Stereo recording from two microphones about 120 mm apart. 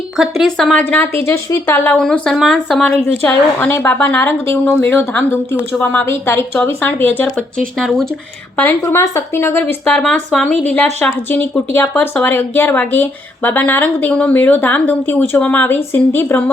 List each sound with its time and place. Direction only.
0.2 s speech: centre (ahead or behind)
1.2 s a woman's voice: 25° left (ahead or behind)
2.0 s speech: 5° left (ahead or behind)
2.8 s speech: 15° left (ahead or behind)
7.8 s speech: centre (ahead or behind)
8.5 s a woman's voice: 20° left (ahead or behind)
9.8 s speech: 5° left (ahead or behind)